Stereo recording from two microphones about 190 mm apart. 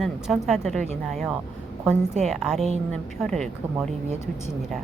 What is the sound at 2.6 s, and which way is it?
Speech, 35° right (ahead or behind).